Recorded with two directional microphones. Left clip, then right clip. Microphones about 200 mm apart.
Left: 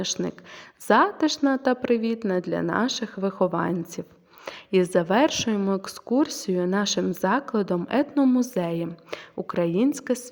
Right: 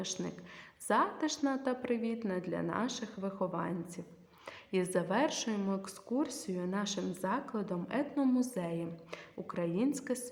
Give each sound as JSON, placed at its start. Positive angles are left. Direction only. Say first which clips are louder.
{"t": 0.0, "sound": "a woman's voice", "louder": "left 11 dB", "side_deg": 40}